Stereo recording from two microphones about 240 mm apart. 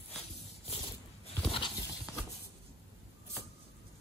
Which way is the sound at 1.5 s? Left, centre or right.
Centre.